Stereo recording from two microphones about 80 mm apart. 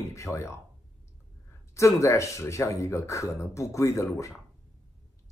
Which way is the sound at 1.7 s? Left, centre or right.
Left.